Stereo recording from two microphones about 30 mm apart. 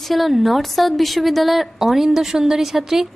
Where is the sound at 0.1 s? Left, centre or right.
Centre.